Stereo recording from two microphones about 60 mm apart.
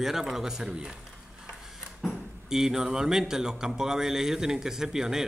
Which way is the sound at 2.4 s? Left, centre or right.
Centre.